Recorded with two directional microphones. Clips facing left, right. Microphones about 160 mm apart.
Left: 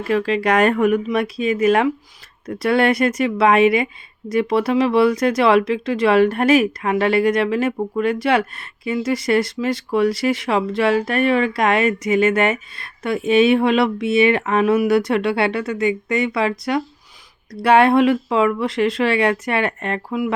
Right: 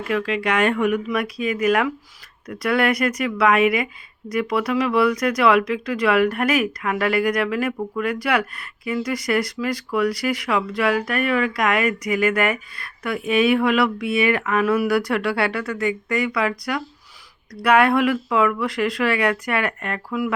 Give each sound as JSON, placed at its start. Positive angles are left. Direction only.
{"t": 0.1, "sound": "speech", "side_deg": 35}
{"t": 1.0, "sound": "speech", "side_deg": 25}